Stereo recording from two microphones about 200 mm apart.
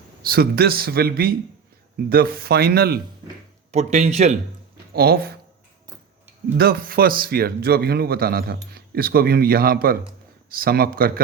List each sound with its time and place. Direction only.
0.2 s speech: 50° right (ahead or behind)
3.7 s speech: 35° right (ahead or behind)
4.9 s speech: 50° right (ahead or behind)
6.6 s speech: 50° right (ahead or behind)